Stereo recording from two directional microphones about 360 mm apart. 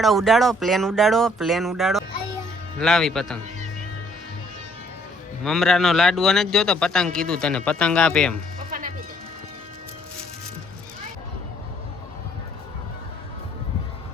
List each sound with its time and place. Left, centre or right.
0.0 s a man's voice: centre
5.4 s a man's voice: centre
8.5 s sheep: right